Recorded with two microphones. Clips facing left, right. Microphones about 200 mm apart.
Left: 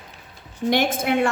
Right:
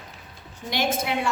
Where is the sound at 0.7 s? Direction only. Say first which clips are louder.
Left 4 dB; 55° left (ahead or behind).